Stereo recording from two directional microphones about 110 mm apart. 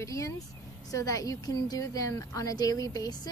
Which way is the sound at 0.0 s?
30° left (ahead or behind).